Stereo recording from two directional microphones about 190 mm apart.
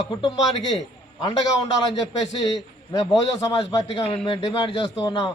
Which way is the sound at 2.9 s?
20° left (ahead or behind).